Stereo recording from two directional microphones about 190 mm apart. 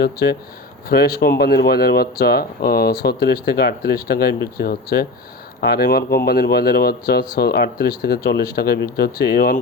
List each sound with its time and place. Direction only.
0.0 s speech: 60° left (ahead or behind)